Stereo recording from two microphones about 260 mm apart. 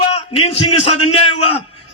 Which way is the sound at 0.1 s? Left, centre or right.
Left.